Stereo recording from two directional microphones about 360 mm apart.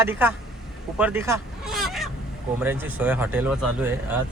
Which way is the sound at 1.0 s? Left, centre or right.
Centre.